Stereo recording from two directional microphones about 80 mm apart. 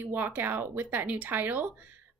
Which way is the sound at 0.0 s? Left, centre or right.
Right.